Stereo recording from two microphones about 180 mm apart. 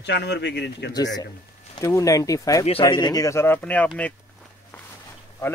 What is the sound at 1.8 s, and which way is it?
A man's voice, 15° left (ahead or behind).